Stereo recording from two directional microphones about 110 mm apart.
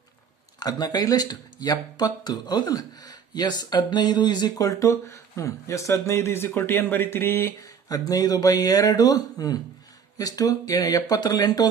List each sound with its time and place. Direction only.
0.6 s speech: 35° left (ahead or behind); by 7.5 s 20° left (ahead or behind)
7.6 s speech: 35° left (ahead or behind)